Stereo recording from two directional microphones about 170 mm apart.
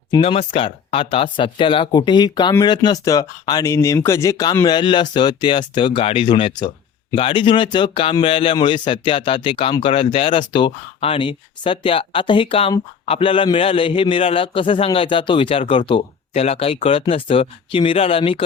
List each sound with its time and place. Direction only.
0.1 s a man's voice: 35° left (ahead or behind)